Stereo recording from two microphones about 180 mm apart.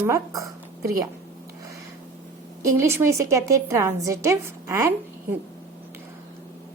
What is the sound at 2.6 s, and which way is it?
A woman's voice, 15° right (ahead or behind).